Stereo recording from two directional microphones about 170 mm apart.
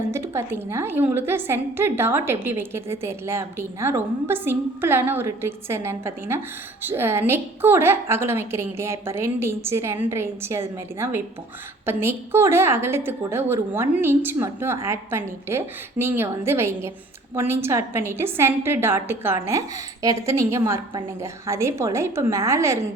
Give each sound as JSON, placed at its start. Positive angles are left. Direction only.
{"t": 0.1, "sound": "a woman's voice", "side_deg": -15}